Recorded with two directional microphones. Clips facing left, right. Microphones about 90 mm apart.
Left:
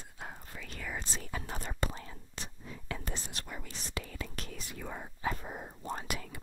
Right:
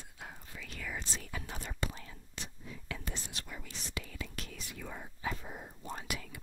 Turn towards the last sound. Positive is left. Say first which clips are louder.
# left 3 dB
turn(degrees=45)  # may be behind; listen again after turning